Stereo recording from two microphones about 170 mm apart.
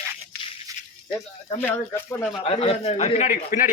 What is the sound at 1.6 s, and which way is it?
Speech, 15° left (ahead or behind).